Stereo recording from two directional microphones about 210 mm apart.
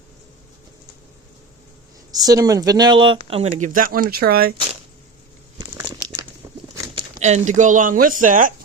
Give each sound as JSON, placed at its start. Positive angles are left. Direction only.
{"t": 2.1, "sound": "speech", "side_deg": -15}
{"t": 6.7, "sound": "a sound", "side_deg": -15}
{"t": 7.2, "sound": "speech", "side_deg": -35}